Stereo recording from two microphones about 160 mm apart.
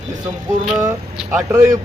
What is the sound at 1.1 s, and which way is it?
Speech, 10° right (ahead or behind).